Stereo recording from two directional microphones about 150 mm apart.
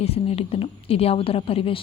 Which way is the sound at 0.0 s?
40° left (ahead or behind).